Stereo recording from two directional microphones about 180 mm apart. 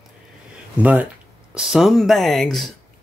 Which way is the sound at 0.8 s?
10° right (ahead or behind).